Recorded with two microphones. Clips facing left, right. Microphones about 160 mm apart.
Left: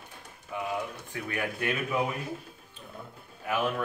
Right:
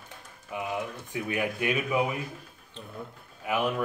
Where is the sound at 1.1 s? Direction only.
15° right (ahead or behind).